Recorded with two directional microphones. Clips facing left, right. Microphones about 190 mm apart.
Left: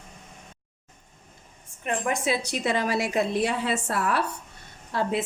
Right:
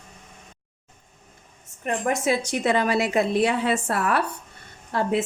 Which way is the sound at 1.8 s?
45° right (ahead or behind).